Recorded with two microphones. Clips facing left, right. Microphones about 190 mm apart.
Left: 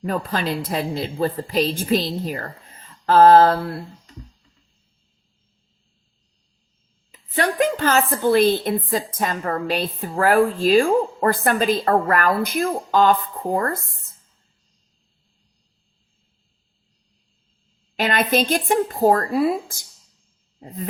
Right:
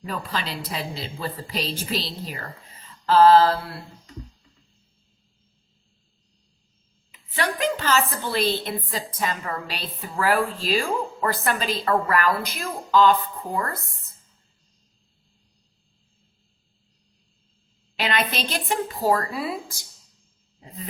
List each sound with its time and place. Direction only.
0.0 s a woman's voice: 50° left (ahead or behind)
7.1 s a woman's voice: 45° left (ahead or behind)
17.9 s a woman's voice: 45° left (ahead or behind)
20.6 s a sound: 50° left (ahead or behind)